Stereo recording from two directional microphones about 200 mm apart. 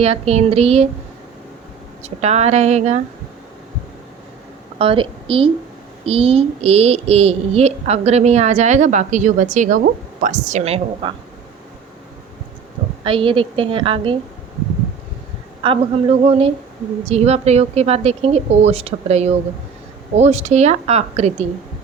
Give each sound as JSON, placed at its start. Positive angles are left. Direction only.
{"t": 0.0, "sound": "a child's voice", "side_deg": -30}
{"t": 2.0, "sound": "a child's voice", "side_deg": -35}
{"t": 4.8, "sound": "a woman's voice", "side_deg": -25}
{"t": 13.1, "sound": "a woman's voice", "side_deg": -25}
{"t": 15.6, "sound": "a woman's voice", "side_deg": -25}